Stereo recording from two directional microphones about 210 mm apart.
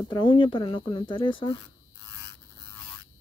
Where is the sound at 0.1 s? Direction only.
25° left (ahead or behind).